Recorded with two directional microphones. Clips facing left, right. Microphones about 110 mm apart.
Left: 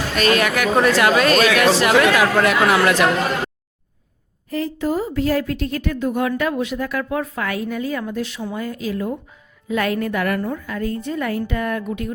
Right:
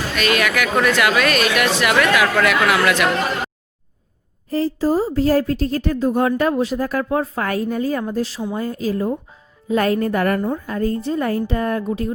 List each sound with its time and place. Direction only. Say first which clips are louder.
0.2 s speech: left 2 dB; 35° left (ahead or behind)
4.4 s a woman's voice: right 3 dB; 35° right (ahead or behind)